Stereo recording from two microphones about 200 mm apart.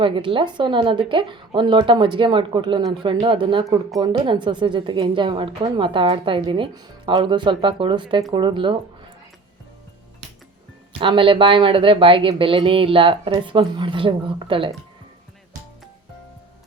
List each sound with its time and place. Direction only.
0.0 s a woman's voice: 25° right (ahead or behind)
11.0 s a woman's voice: 25° right (ahead or behind)